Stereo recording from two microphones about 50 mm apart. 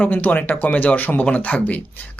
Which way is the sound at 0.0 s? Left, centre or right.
Left.